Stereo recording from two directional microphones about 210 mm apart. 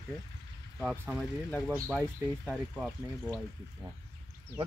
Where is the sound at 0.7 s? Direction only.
5° right (ahead or behind).